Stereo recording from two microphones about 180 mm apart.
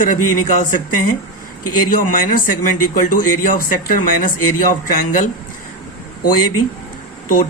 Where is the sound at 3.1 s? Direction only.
50° left (ahead or behind).